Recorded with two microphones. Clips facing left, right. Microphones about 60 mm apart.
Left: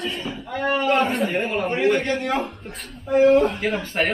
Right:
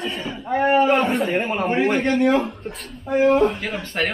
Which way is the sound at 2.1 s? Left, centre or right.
Centre.